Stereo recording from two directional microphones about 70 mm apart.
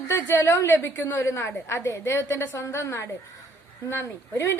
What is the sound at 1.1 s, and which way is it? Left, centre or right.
A woman's voice, left.